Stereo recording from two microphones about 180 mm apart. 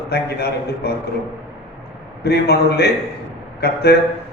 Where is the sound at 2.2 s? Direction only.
60° left (ahead or behind).